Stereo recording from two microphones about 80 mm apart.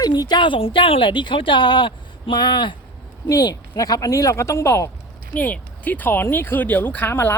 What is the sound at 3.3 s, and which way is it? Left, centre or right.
Speech, left.